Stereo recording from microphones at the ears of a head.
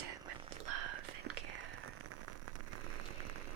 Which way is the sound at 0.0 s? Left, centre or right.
Right.